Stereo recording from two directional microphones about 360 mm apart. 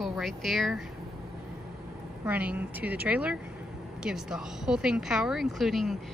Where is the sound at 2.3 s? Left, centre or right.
Centre.